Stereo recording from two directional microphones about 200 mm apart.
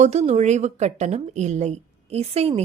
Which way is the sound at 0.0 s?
35° right (ahead or behind).